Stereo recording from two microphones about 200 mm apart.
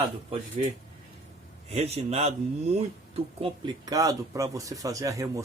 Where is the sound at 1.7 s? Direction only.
30° right (ahead or behind).